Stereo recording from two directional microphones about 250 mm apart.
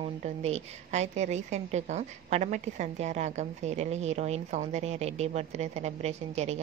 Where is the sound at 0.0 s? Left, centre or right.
Right.